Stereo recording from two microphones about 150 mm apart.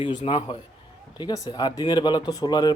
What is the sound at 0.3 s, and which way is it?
Speech, 35° left (ahead or behind).